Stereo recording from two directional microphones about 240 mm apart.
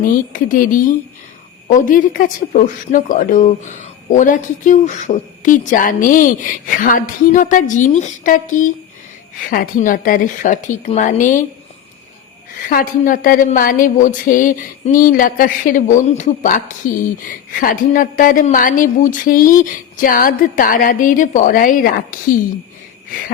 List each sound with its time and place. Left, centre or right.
0.3 s speech: left
12.5 s speech: left